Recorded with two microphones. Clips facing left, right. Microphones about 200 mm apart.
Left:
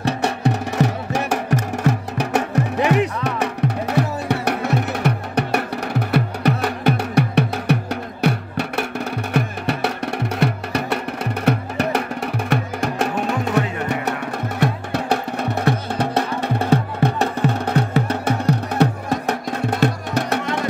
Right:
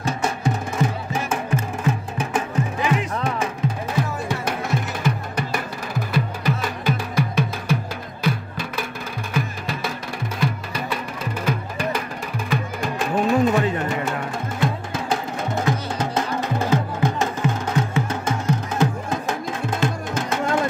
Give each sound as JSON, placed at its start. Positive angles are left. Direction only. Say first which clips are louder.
{"t": 0.0, "sound": "music", "louder": "left 3 dB", "side_deg": 65}